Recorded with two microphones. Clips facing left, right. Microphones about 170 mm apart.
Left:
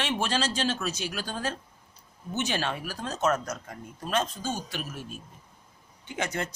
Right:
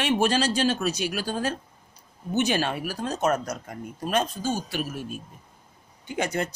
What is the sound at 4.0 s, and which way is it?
Speech, 10° right (ahead or behind).